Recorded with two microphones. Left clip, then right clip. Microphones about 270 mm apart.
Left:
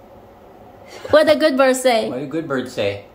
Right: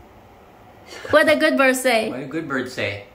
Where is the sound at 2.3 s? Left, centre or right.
Left.